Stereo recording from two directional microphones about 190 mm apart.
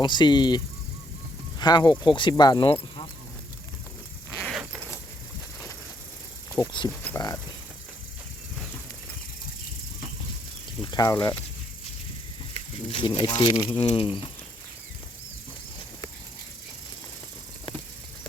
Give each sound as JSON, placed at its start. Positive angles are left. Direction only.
{"t": 0.0, "sound": "speech", "side_deg": 25}
{"t": 4.4, "sound": "zipper", "side_deg": 0}
{"t": 6.6, "sound": "speech", "side_deg": 20}
{"t": 10.9, "sound": "speech", "side_deg": 20}
{"t": 12.5, "sound": "speech", "side_deg": 30}